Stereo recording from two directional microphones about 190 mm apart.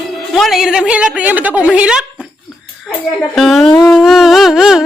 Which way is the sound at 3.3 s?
Centre (ahead or behind).